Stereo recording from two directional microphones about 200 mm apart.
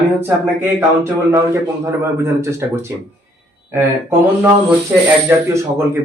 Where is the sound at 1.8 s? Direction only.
15° right (ahead or behind).